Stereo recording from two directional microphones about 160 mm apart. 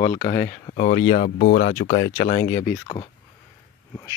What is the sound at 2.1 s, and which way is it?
Speech, 40° left (ahead or behind).